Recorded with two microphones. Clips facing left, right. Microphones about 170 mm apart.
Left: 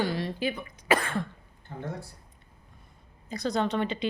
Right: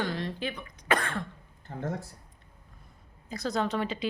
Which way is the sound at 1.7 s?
50° right (ahead or behind).